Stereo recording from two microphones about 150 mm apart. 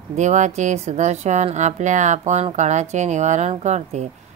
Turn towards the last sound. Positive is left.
turn(degrees=-50)  # may be behind; listen again after turning